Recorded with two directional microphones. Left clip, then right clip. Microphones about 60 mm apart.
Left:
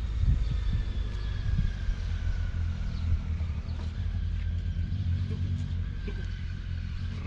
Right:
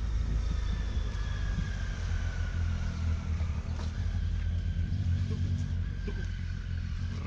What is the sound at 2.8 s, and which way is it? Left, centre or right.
Vehicle, right.